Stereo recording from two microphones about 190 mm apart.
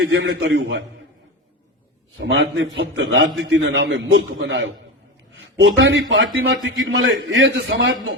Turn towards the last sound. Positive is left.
turn(degrees=-85)